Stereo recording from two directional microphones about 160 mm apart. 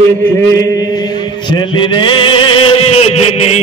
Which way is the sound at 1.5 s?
30° left (ahead or behind).